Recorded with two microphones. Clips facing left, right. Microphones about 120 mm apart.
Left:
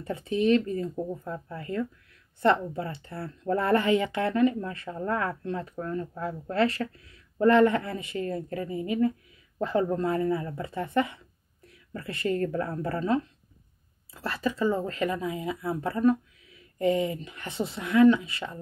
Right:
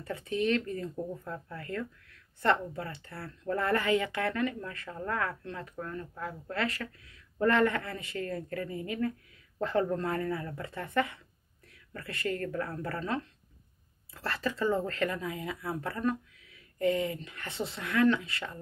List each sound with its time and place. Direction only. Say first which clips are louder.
0.0 s speech: left 5 dB; 20° left (ahead or behind)